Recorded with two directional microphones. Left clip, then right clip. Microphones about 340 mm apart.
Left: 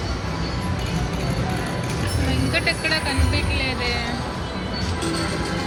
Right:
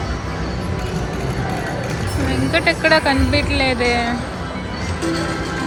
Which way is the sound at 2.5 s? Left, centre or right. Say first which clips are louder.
Right 8 dB; right.